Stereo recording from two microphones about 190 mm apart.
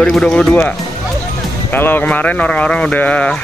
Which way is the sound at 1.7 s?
10° left (ahead or behind).